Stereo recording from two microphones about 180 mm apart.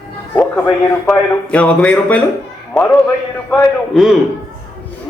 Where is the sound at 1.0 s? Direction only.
5° left (ahead or behind).